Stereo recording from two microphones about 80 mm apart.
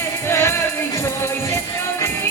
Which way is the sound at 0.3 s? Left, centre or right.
Left.